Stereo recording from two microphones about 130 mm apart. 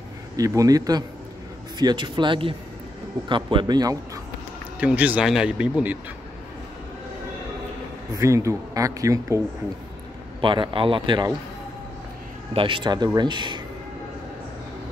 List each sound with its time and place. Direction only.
0.4 s speech: 25° right (ahead or behind)
4.7 s speech: 10° right (ahead or behind)
8.2 s speech: 25° right (ahead or behind)
10.4 s speech: 40° right (ahead or behind)
12.5 s speech: 40° right (ahead or behind)